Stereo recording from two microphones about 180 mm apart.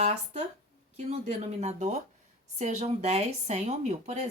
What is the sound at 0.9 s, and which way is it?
Speech, 40° right (ahead or behind).